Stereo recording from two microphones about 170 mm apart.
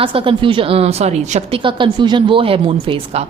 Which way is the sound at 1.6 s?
30° right (ahead or behind).